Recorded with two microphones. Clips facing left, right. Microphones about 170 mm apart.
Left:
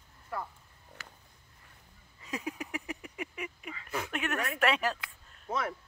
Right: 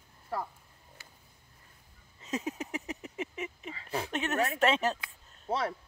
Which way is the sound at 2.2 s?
20° right (ahead or behind).